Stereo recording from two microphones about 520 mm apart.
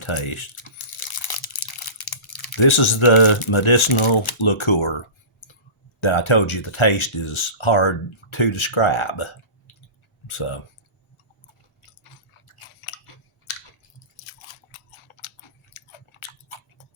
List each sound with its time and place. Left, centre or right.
0.0 s speech: left
0.9 s crunch: left
2.3 s typing: left
2.6 s speech: left
5.4 s clicking: left
6.0 s speech: left
11.4 s chewing: left
14.4 s scissors: left
15.7 s chewing: left